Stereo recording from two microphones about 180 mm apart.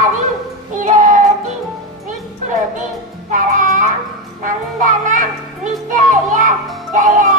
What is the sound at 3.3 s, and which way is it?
A child's voice, 45° right (ahead or behind).